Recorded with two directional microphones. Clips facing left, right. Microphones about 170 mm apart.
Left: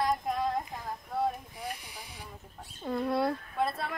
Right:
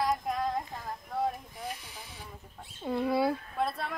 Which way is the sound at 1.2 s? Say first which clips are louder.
Left 1 dB; 10° left (ahead or behind).